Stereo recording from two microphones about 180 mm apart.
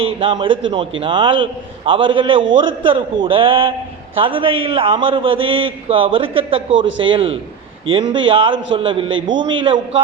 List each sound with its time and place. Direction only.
0.2 s a man's voice: 30° right (ahead or behind)
6.7 s a man's voice: 90° right
7.0 s a man's voice: 30° right (ahead or behind)
9.0 s a man's voice: 90° right
9.4 s a man's voice: 30° right (ahead or behind)